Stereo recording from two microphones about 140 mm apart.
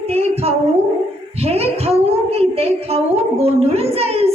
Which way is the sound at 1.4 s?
45° right (ahead or behind).